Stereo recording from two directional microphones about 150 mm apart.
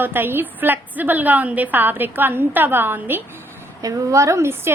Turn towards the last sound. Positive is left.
turn(degrees=-15)  # may be behind; listen again after turning